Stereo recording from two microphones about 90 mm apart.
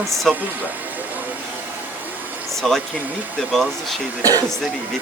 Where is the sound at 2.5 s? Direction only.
5° left (ahead or behind).